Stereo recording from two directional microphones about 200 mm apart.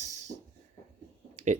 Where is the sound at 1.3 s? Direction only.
35° right (ahead or behind).